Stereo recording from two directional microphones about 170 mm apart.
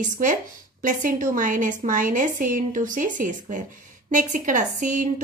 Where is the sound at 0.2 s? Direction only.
50° right (ahead or behind).